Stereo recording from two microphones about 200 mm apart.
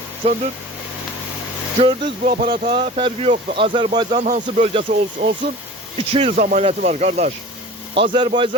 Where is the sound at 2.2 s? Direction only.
40° right (ahead or behind).